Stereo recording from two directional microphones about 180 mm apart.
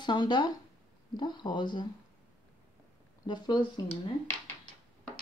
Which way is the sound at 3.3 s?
25° left (ahead or behind).